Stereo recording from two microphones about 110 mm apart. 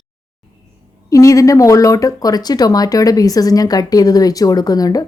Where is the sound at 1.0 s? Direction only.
30° left (ahead or behind).